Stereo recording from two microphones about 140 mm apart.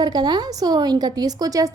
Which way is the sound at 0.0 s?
30° right (ahead or behind).